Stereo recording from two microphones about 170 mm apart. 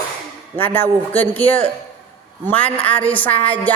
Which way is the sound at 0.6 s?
10° left (ahead or behind).